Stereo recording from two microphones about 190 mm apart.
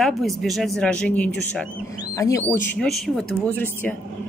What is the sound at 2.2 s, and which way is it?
Speech, 15° left (ahead or behind).